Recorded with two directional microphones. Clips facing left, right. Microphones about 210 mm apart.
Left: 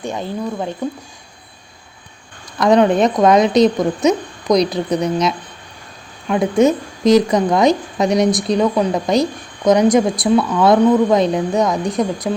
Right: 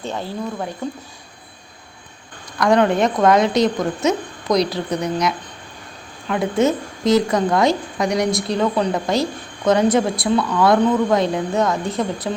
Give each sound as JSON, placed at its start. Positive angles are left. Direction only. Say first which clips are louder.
{"t": 0.0, "sound": "speech", "louder": "left 3 dB", "side_deg": 15}
{"t": 2.6, "sound": "a woman's voice", "louder": "left 3 dB", "side_deg": 20}